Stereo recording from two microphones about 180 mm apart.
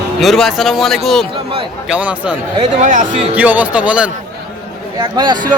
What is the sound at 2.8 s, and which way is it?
Speech, 45° right (ahead or behind).